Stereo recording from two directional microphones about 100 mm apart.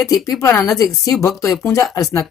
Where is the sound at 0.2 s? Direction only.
30° left (ahead or behind).